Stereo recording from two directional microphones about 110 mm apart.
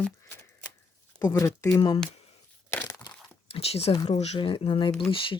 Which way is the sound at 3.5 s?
65° left (ahead or behind).